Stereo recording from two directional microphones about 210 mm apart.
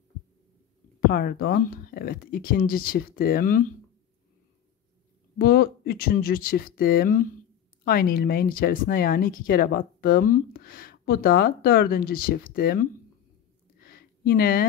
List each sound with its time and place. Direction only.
1.0 s speech: 45° left (ahead or behind)
5.4 s speech: 45° left (ahead or behind)
13.8 s a sound: 45° left (ahead or behind)